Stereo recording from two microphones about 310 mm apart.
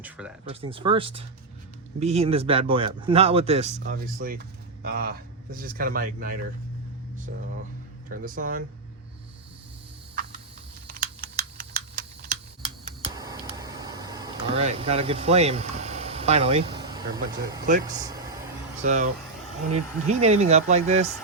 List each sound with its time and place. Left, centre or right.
0.0 s speech: centre
0.6 s speech: centre
8.1 s speech: right
10.8 s typing: right
17.8 s vehicle: centre
18.8 s speech: right